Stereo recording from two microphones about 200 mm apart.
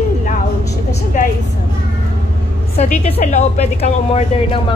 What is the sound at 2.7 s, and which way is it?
Speech, 30° left (ahead or behind).